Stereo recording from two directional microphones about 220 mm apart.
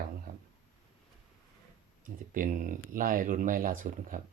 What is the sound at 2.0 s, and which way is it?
Speech, 40° right (ahead or behind).